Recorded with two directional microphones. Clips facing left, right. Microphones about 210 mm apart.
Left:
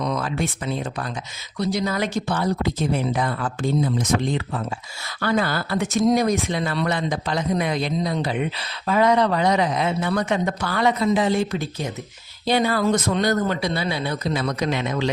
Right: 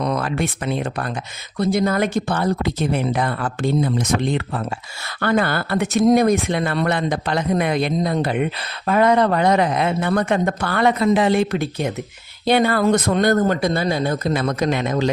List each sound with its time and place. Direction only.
0.0 s speech: 60° right (ahead or behind)